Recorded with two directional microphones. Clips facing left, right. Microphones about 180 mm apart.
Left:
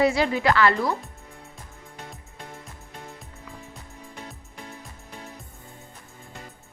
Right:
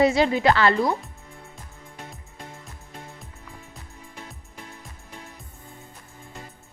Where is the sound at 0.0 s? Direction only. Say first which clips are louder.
Right 2 dB; 20° right (ahead or behind).